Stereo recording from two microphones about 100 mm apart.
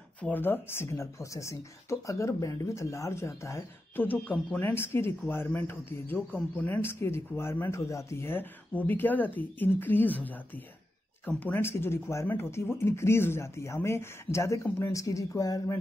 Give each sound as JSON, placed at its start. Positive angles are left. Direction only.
{"t": 0.2, "sound": "speech", "side_deg": 20}
{"t": 4.0, "sound": "speech", "side_deg": 15}